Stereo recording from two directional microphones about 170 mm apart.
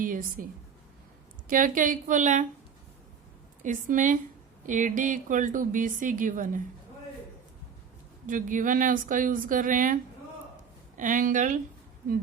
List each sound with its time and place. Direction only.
0.0 s speech: 55° right (ahead or behind)
1.5 s speech: 55° right (ahead or behind)
3.6 s speech: 50° right (ahead or behind)
8.3 s speech: 50° right (ahead or behind)